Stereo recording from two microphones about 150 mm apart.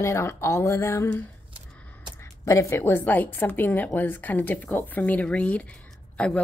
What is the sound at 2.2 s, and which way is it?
A woman's voice, 20° left (ahead or behind).